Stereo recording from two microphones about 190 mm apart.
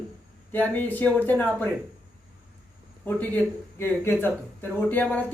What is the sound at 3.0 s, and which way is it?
A woman's voice, 10° left (ahead or behind).